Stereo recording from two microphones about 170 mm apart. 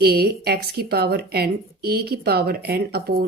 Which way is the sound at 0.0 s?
65° right (ahead or behind).